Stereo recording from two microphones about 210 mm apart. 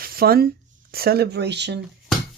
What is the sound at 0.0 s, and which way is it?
Speech, 45° right (ahead or behind).